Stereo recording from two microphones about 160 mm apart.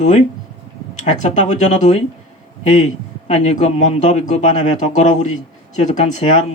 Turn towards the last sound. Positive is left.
turn(degrees=45)  # may be behind; listen again after turning